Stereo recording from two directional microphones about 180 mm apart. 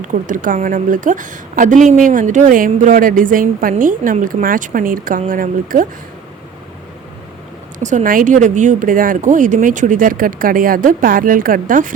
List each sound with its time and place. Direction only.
0.0 s a woman's voice: 45° right (ahead or behind)
7.8 s a woman's voice: 45° right (ahead or behind)